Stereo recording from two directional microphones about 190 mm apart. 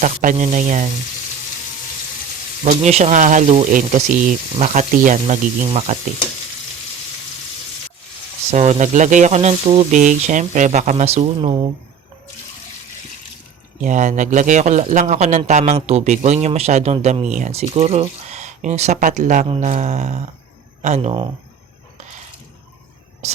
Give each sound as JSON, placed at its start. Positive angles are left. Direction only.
{"t": 0.0, "sound": "a man's voice", "side_deg": -40}
{"t": 2.6, "sound": "a man's voice", "side_deg": -35}
{"t": 5.6, "sound": "a man's voice", "side_deg": -30}
{"t": 8.4, "sound": "a man's voice", "side_deg": -35}
{"t": 13.8, "sound": "a man's voice", "side_deg": -40}